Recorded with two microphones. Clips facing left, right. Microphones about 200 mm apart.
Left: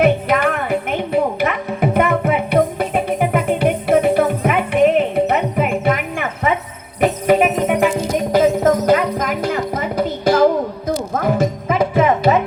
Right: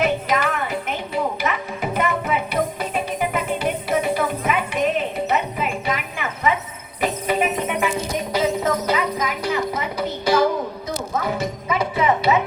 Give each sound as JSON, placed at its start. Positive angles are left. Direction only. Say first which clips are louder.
{"t": 0.0, "sound": "music", "louder": "left 6 dB", "side_deg": 55}